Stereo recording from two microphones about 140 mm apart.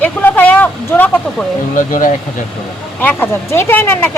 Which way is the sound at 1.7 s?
65° left (ahead or behind).